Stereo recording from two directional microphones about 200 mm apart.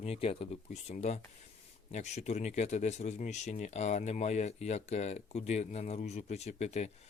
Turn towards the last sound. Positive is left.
turn(degrees=35)  # may be behind; listen again after turning